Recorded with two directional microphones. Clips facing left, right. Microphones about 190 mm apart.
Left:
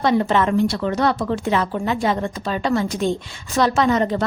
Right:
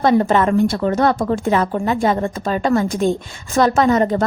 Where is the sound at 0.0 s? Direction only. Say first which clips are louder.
Right 3 dB; 45° right (ahead or behind).